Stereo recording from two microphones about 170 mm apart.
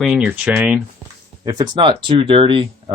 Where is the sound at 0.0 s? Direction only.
5° right (ahead or behind).